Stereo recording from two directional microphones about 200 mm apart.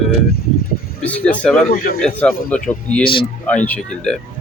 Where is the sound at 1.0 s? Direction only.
5° left (ahead or behind).